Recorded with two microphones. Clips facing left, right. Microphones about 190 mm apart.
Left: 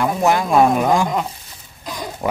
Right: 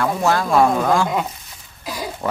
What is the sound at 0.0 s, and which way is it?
A man's voice, 15° left (ahead or behind).